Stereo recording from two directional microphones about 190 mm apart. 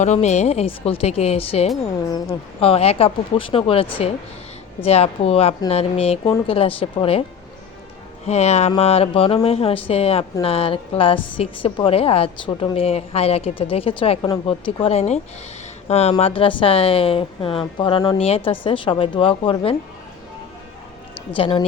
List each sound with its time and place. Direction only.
0.0 s a woman's voice: 35° left (ahead or behind)
8.3 s a woman's voice: 35° left (ahead or behind)
21.3 s a woman's voice: 30° left (ahead or behind)